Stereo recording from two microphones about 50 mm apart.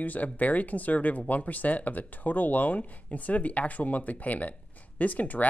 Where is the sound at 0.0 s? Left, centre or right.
Left.